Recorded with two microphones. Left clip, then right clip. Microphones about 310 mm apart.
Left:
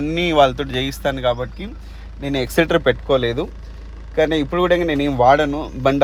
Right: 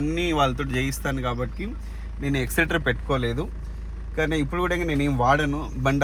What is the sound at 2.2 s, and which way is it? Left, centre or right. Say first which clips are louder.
Speech: left 6 dB; left.